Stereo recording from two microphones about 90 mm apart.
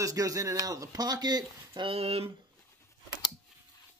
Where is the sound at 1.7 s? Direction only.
90° right.